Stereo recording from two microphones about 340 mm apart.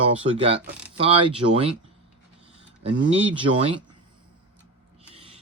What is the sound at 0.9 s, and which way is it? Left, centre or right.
Speech, centre.